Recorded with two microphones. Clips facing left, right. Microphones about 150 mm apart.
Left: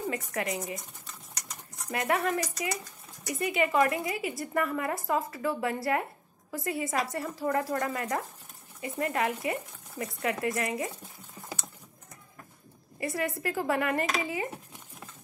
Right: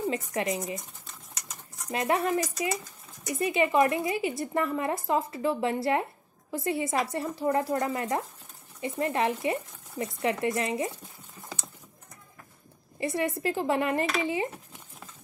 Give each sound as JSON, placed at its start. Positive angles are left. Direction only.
{"t": 0.1, "sound": "a woman's voice", "side_deg": -25}
{"t": 1.9, "sound": "a woman's voice", "side_deg": -25}
{"t": 13.0, "sound": "a woman's voice", "side_deg": -25}